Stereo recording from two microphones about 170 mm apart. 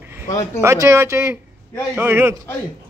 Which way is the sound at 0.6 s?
15° right (ahead or behind).